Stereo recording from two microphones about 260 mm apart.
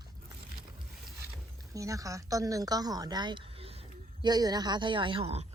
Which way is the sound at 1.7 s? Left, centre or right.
Centre.